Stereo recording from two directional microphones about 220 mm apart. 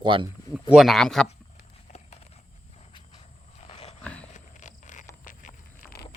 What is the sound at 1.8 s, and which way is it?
Clip-clop, 30° left (ahead or behind).